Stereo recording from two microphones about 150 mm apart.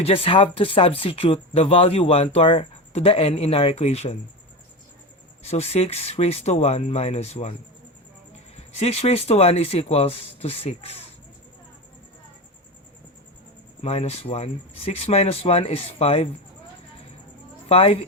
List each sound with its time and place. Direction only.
0.0 s speech: 40° left (ahead or behind)
5.4 s speech: 45° left (ahead or behind)
8.5 s speech: 45° left (ahead or behind)
13.8 s speech: 45° left (ahead or behind)
17.7 s speech: 40° left (ahead or behind)